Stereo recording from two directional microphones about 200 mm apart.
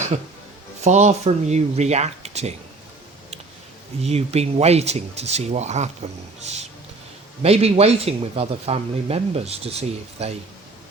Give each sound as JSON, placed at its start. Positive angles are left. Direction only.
{"t": 0.9, "sound": "speech", "side_deg": -35}
{"t": 4.0, "sound": "speech", "side_deg": -30}
{"t": 7.4, "sound": "speech", "side_deg": -30}